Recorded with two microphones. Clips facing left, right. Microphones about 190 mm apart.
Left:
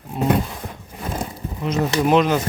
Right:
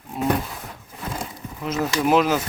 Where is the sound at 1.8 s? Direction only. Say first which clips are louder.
Left 2 dB; 5° right (ahead or behind).